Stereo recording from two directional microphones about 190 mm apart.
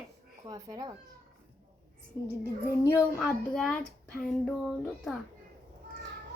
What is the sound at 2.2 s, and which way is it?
Child singing, 20° left (ahead or behind).